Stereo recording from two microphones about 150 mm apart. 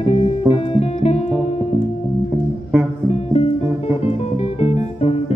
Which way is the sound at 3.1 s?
45° left (ahead or behind).